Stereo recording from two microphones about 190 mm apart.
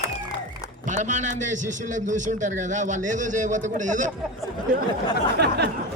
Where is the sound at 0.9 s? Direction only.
40° right (ahead or behind).